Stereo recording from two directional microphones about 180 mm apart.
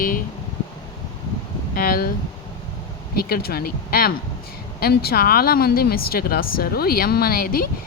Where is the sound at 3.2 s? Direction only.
60° left (ahead or behind).